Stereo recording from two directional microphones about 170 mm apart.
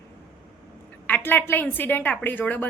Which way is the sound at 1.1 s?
10° left (ahead or behind).